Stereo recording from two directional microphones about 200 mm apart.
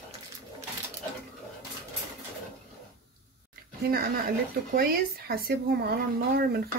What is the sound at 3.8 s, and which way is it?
Speech, 50° right (ahead or behind).